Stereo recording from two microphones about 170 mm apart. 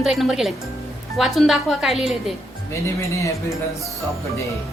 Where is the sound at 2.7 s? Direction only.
15° left (ahead or behind).